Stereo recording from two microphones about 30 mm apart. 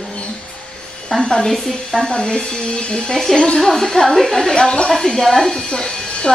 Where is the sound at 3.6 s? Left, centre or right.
Centre.